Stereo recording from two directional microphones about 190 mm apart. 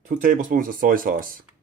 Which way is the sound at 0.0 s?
45° right (ahead or behind).